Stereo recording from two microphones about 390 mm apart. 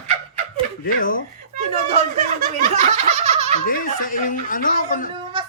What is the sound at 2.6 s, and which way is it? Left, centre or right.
Laughter, centre.